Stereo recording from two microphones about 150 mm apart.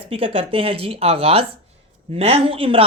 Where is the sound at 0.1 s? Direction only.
40° right (ahead or behind).